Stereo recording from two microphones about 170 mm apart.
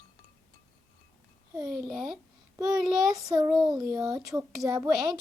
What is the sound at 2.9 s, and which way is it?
A child's voice, 20° right (ahead or behind).